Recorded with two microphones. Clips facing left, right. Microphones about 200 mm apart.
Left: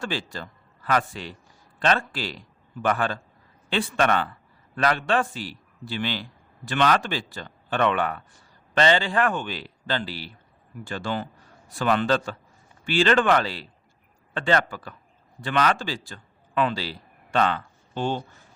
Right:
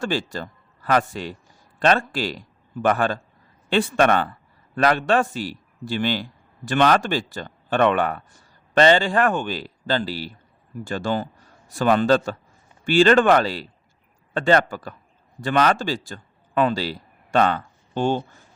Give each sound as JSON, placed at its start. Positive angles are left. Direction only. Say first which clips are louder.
{"t": 0.0, "sound": "a man's voice", "louder": "right 5 dB", "side_deg": -45}